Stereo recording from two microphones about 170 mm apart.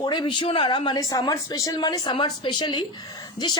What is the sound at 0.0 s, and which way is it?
Speech, 25° left (ahead or behind).